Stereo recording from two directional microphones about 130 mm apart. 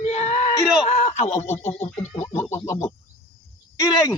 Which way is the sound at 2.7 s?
65° left (ahead or behind).